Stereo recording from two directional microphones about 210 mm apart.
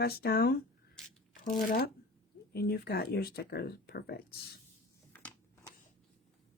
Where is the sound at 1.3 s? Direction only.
45° left (ahead or behind).